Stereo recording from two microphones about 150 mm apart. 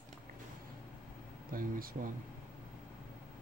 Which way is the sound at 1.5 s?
70° right (ahead or behind).